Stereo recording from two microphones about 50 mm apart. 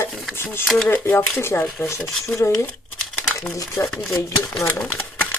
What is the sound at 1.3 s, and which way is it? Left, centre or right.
Speech, left.